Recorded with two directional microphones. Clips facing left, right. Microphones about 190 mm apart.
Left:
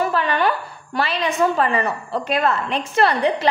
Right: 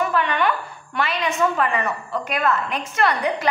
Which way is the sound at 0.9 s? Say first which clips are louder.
Left 2 dB; 30° left (ahead or behind).